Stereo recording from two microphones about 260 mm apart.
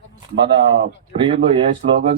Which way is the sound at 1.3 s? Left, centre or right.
Right.